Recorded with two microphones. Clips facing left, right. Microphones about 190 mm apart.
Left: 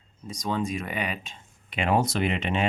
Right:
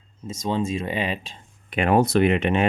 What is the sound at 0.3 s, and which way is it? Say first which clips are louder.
Speech: right 4 dB; 25° right (ahead or behind).